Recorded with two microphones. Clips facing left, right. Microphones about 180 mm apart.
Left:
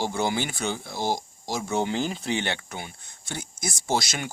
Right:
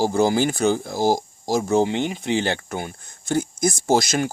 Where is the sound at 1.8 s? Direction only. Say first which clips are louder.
Right 4 dB; 25° right (ahead or behind).